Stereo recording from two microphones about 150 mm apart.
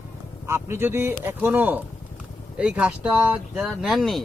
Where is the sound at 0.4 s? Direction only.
15° right (ahead or behind).